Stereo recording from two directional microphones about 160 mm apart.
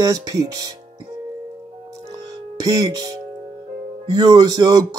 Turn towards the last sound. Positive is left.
turn(degrees=-25)  # may be behind; listen again after turning